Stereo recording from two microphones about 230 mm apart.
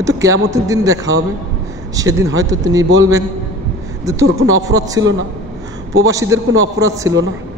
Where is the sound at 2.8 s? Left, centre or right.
Right.